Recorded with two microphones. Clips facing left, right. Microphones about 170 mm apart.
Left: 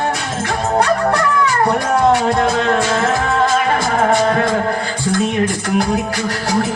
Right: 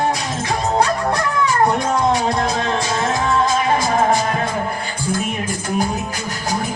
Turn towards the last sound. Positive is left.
turn(degrees=80)